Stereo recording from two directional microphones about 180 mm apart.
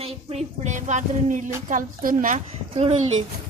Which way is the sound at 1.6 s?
50° right (ahead or behind).